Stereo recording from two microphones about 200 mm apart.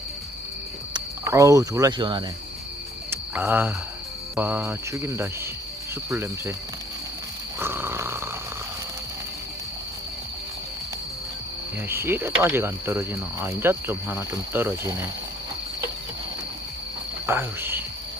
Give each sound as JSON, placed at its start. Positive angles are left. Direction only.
{"t": 0.9, "sound": "speech", "side_deg": -15}
{"t": 3.1, "sound": "cricket", "side_deg": -10}
{"t": 4.4, "sound": "speech", "side_deg": -10}
{"t": 7.6, "sound": "snoring", "side_deg": -10}
{"t": 11.9, "sound": "speech", "side_deg": -10}
{"t": 17.2, "sound": "speech", "side_deg": -10}